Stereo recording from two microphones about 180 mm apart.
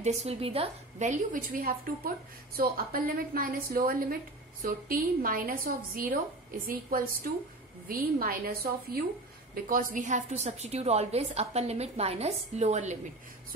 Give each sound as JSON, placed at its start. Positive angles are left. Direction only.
{"t": 0.0, "sound": "a woman's voice", "side_deg": -35}